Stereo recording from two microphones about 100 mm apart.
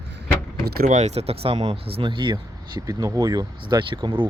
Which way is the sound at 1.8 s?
65° right (ahead or behind).